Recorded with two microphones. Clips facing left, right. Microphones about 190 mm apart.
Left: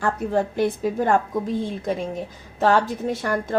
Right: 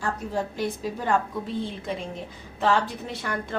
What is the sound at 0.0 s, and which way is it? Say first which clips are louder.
A woman's voice: left 6 dB; 55° left (ahead or behind).